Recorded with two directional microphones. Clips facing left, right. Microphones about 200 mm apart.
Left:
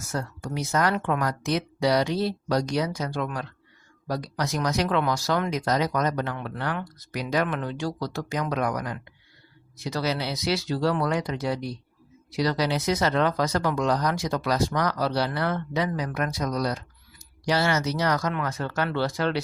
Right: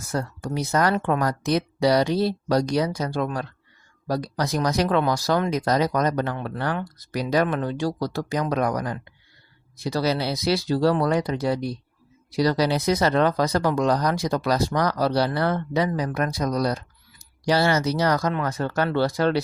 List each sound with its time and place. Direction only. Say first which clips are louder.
0.0 s speech: right 4 dB; 35° right (ahead or behind)